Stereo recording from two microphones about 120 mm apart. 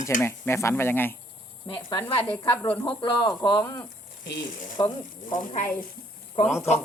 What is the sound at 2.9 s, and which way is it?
Speech, 45° left (ahead or behind).